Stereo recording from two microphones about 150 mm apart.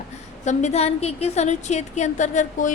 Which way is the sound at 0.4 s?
50° left (ahead or behind).